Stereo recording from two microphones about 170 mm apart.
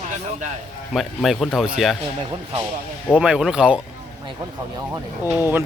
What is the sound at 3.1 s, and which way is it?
Speech, 5° right (ahead or behind).